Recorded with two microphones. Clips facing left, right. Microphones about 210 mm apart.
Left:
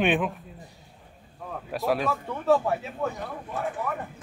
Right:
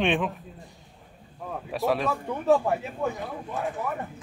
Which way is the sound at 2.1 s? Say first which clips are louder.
Right 1 dB; 15° right (ahead or behind).